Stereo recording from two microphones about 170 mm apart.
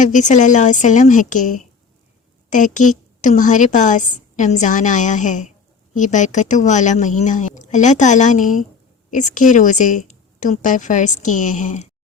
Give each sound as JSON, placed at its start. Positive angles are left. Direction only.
{"t": 0.0, "sound": "a woman's voice", "side_deg": 45}